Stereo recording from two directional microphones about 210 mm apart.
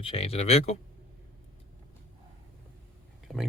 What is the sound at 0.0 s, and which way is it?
Speech, 30° left (ahead or behind).